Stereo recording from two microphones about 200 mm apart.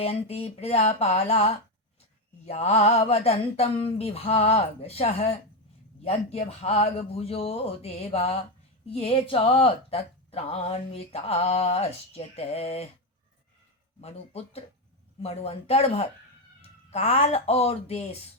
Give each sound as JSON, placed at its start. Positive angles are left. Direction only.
{"t": 0.0, "sound": "speech", "side_deg": 30}
{"t": 14.0, "sound": "speech", "side_deg": 30}